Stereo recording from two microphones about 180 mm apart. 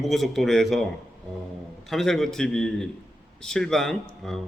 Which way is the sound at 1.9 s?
Centre (ahead or behind).